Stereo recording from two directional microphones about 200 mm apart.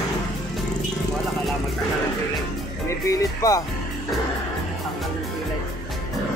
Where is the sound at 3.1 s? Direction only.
15° left (ahead or behind).